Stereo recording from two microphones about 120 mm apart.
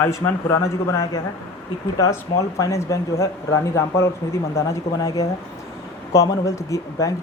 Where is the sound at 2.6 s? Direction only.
25° left (ahead or behind).